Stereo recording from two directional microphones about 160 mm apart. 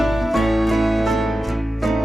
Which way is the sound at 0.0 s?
Centre (ahead or behind).